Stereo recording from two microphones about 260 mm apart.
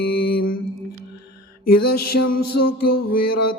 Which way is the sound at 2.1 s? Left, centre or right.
Left.